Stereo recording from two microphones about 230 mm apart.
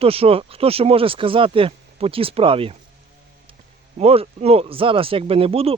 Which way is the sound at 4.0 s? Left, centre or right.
Right.